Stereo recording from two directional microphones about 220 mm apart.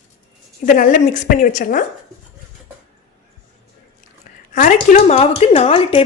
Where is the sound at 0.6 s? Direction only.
35° left (ahead or behind).